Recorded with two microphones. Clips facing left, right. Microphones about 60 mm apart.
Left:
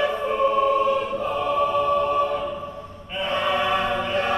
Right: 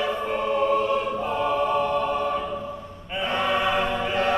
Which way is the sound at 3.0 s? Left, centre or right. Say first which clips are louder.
Left 1 dB; centre.